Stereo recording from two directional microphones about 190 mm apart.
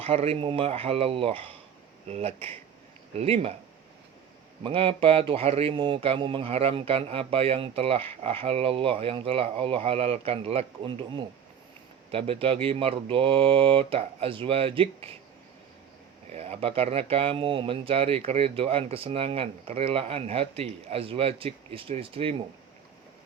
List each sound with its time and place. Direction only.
0.0 s speech: 30° right (ahead or behind)
4.6 s speech: 30° right (ahead or behind)
16.3 s speech: 30° right (ahead or behind)